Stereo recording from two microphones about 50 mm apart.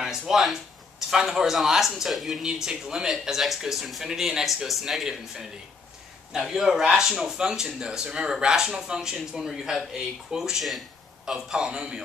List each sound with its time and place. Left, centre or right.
0.3 s speech: centre